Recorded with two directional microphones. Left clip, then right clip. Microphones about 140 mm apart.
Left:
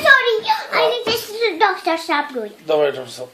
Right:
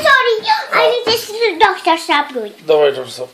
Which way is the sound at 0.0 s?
20° left (ahead or behind).